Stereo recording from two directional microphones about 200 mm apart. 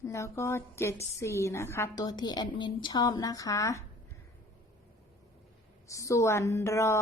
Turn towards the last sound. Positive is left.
turn(degrees=15)  # may be behind; listen again after turning